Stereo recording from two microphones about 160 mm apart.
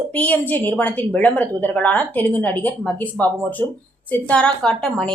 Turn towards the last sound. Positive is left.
turn(degrees=5)  # may be behind; listen again after turning